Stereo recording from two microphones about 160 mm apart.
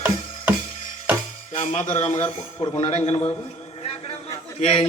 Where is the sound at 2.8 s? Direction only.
40° left (ahead or behind).